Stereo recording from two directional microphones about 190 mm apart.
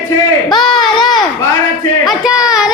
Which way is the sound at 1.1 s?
20° left (ahead or behind).